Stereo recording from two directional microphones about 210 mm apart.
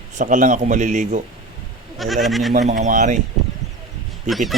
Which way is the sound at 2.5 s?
35° right (ahead or behind).